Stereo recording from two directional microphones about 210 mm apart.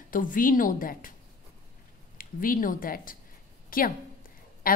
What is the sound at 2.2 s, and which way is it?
A woman's voice, 40° left (ahead or behind).